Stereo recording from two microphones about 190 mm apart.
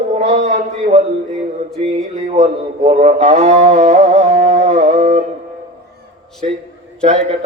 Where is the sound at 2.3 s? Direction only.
35° right (ahead or behind).